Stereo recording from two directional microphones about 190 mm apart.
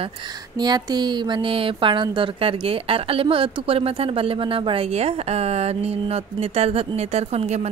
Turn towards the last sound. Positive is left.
turn(degrees=-35)  # may be behind; listen again after turning